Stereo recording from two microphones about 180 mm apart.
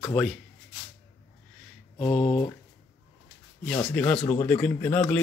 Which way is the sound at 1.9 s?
30° left (ahead or behind).